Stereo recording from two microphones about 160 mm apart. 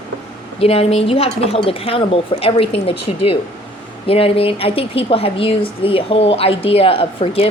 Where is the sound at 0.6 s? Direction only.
40° left (ahead or behind).